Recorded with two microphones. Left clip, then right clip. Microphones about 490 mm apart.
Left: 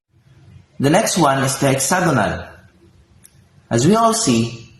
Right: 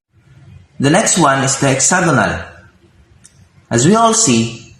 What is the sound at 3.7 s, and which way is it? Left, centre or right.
Speech, left.